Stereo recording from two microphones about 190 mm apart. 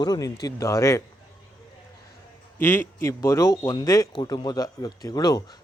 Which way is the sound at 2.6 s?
10° left (ahead or behind).